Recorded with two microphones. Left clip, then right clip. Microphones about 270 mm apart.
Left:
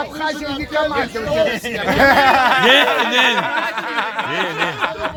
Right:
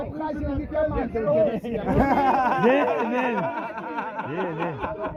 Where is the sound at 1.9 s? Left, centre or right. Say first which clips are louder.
Left 9 dB; left.